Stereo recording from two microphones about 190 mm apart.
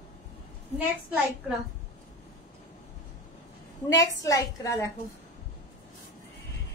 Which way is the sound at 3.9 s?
15° left (ahead or behind).